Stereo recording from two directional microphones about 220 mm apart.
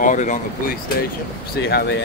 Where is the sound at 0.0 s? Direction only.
35° left (ahead or behind).